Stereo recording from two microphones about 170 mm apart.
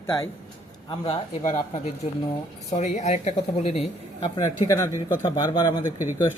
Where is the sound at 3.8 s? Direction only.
35° left (ahead or behind).